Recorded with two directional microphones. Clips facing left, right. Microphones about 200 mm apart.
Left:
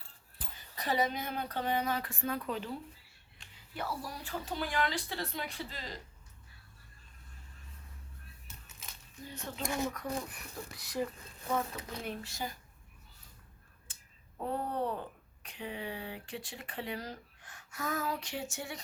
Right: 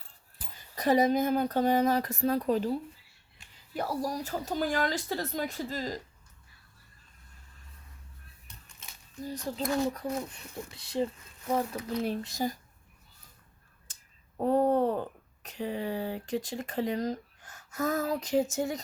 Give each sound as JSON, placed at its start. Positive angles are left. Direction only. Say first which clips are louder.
{"t": 0.8, "sound": "speech", "louder": "right 9 dB", "side_deg": -45}
{"t": 3.4, "sound": "a sound", "louder": "even", "side_deg": -5}
{"t": 3.8, "sound": "speech", "louder": "right 8 dB", "side_deg": -40}
{"t": 8.4, "sound": "a sound", "louder": "right 1 dB", "side_deg": 5}
{"t": 9.2, "sound": "speech", "louder": "right 7 dB", "side_deg": -35}
{"t": 14.3, "sound": "speech", "louder": "right 10 dB", "side_deg": -40}